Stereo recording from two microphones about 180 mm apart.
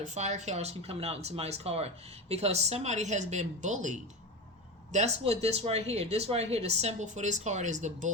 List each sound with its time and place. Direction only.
0.0 s speech: 40° right (ahead or behind)